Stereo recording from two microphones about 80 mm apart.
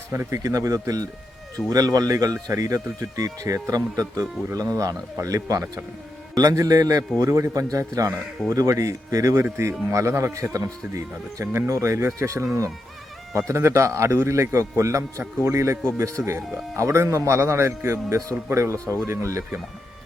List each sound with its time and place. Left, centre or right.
0.1 s a man's voice: right